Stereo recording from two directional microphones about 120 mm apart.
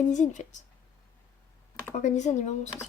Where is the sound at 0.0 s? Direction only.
90° left.